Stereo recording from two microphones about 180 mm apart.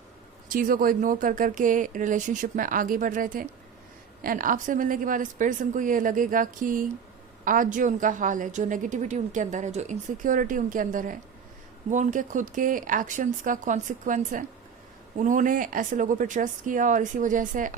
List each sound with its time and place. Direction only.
0.4 s a woman's voice: 50° right (ahead or behind)